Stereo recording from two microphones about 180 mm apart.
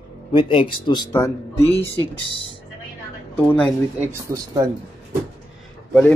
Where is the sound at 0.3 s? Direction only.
30° left (ahead or behind).